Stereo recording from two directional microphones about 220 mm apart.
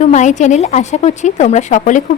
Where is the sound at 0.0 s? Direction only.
30° left (ahead or behind).